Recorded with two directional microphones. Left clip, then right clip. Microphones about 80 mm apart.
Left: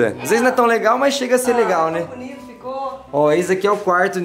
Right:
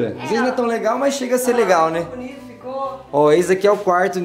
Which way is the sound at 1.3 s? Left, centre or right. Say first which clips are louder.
Right 3 dB; centre.